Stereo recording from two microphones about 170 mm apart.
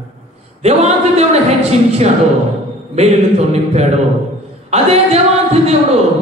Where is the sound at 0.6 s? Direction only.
40° right (ahead or behind).